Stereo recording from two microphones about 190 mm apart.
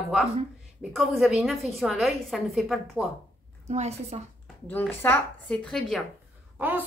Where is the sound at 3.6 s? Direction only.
35° right (ahead or behind).